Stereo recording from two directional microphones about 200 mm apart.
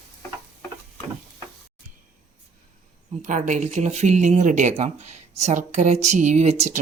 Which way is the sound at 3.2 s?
40° right (ahead or behind).